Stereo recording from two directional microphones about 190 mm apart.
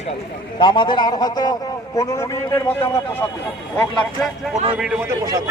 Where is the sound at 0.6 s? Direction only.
25° left (ahead or behind); by 4.3 s 5° left (ahead or behind).